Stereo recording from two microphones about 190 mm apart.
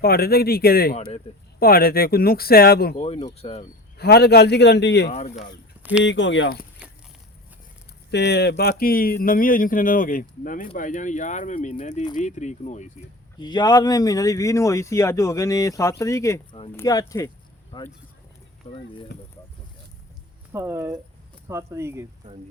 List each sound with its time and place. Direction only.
0.0 s speech: 55° left (ahead or behind)
2.9 s speech: 30° left (ahead or behind)
3.9 s a man's voice: 55° left (ahead or behind)
5.0 s speech: 35° left (ahead or behind)
6.0 s speech: 75° left (ahead or behind)
8.1 s a man's voice: 60° left (ahead or behind); by 12.9 s 40° left (ahead or behind)
13.4 s speech: 20° left (ahead or behind)
20.5 s speech: 15° right (ahead or behind)